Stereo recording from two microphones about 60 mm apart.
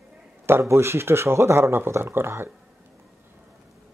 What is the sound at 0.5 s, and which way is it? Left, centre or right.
Speech, right.